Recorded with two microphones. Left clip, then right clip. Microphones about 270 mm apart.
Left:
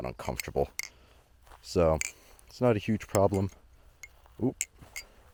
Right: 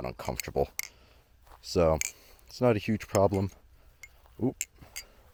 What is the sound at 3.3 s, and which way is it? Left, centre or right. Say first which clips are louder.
Speech: even; right.